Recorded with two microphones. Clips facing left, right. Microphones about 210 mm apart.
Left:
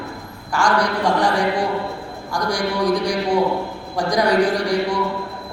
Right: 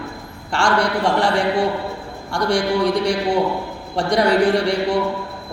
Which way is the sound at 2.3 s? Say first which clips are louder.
Right 4 dB; 25° right (ahead or behind).